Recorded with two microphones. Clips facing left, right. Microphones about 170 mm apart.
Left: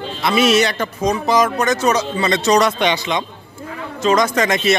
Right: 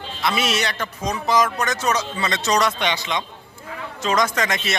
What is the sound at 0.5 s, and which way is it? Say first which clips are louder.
Speech: left 8 dB; 10° left (ahead or behind).